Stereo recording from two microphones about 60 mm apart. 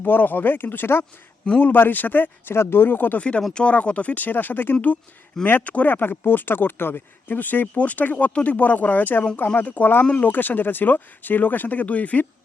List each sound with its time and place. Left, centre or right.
0.0 s speech: left
3.2 s speech: left